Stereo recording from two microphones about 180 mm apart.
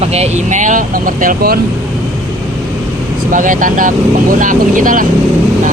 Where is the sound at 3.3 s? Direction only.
45° right (ahead or behind).